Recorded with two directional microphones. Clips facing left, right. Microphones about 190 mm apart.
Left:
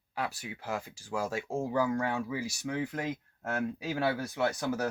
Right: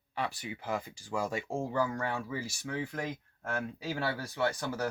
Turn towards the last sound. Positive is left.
turn(degrees=15)  # may be behind; listen again after turning